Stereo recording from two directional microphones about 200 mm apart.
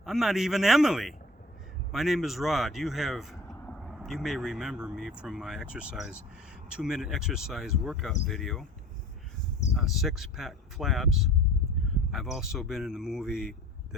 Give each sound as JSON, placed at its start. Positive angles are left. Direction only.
{"t": 0.0, "sound": "speech", "side_deg": 0}
{"t": 9.7, "sound": "speech", "side_deg": 0}